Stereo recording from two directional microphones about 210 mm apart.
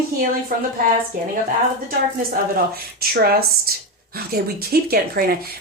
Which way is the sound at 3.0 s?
45° right (ahead or behind).